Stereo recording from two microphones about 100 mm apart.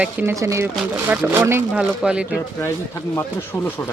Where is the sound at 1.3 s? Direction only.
25° right (ahead or behind).